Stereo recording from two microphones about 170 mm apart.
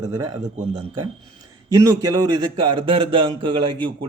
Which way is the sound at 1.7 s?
20° right (ahead or behind).